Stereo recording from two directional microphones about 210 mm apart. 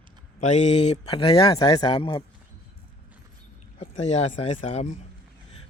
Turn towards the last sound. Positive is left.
turn(degrees=35)  # may be behind; listen again after turning